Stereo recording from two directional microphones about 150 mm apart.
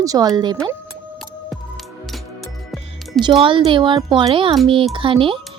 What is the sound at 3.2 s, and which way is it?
Speech, 35° right (ahead or behind).